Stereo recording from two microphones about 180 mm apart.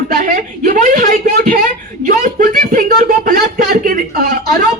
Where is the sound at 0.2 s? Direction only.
50° right (ahead or behind).